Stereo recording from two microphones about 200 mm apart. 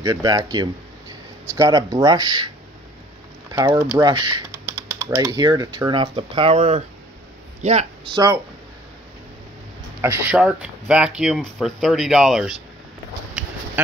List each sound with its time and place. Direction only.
0.0 s speech: 20° right (ahead or behind)
3.5 s speech: 20° right (ahead or behind)
10.0 s speech: 10° right (ahead or behind)